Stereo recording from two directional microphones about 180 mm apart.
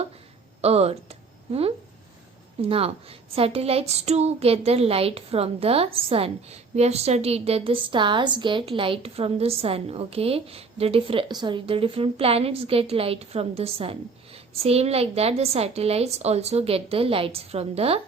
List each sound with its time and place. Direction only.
0.6 s a woman's voice: 35° right (ahead or behind)
2.6 s a woman's voice: 35° right (ahead or behind)